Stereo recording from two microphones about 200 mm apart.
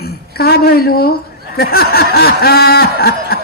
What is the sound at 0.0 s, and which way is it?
A woman's voice, 50° left (ahead or behind).